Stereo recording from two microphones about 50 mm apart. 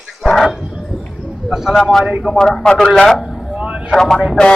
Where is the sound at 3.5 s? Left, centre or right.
Right.